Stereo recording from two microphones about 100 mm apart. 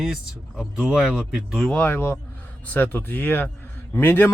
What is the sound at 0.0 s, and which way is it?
Speech, centre (ahead or behind).